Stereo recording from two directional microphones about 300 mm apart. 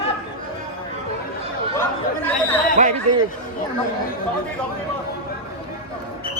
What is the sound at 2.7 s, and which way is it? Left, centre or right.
Speech, right.